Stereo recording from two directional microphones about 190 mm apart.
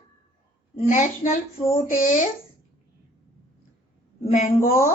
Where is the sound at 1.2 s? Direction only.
40° left (ahead or behind).